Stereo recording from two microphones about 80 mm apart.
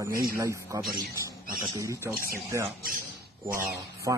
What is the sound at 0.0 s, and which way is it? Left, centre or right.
Speech, right.